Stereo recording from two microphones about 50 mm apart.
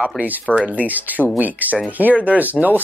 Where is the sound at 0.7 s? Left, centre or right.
Right.